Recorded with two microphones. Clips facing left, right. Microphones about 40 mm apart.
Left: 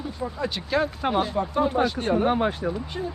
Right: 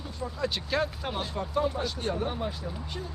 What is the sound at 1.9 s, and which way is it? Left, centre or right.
Speech, left.